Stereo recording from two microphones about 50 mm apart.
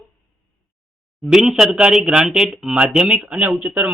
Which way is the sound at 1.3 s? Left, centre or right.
Centre.